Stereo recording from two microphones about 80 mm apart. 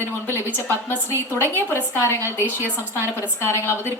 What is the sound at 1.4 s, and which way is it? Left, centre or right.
Speech, left.